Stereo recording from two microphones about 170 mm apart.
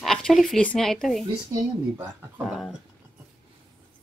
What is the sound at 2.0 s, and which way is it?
Speech, 15° right (ahead or behind).